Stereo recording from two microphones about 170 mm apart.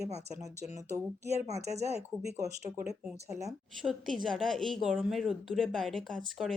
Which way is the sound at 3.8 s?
Centre (ahead or behind).